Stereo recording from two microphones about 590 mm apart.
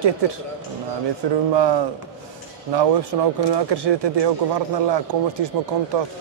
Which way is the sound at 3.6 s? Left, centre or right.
Right.